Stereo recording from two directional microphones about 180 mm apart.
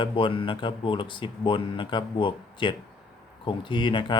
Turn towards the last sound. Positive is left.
turn(degrees=25)  # may be behind; listen again after turning